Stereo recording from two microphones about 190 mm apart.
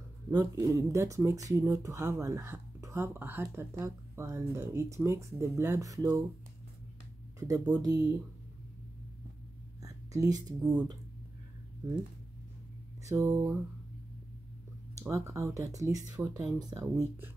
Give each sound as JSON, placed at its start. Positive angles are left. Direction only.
{"t": 0.3, "sound": "speech", "side_deg": -20}
{"t": 7.3, "sound": "speech", "side_deg": -20}
{"t": 9.8, "sound": "speech", "side_deg": -20}
{"t": 13.0, "sound": "speech", "side_deg": -15}
{"t": 15.0, "sound": "speech", "side_deg": -15}